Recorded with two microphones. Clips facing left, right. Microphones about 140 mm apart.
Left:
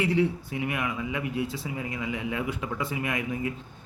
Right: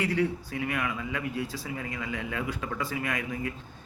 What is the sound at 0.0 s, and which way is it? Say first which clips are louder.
A man's voice: left 3 dB; 20° left (ahead or behind).